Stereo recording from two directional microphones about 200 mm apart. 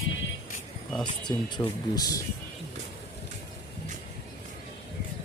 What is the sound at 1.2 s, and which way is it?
Speech, 20° left (ahead or behind).